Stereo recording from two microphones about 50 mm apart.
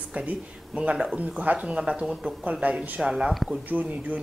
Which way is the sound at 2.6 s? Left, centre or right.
Right.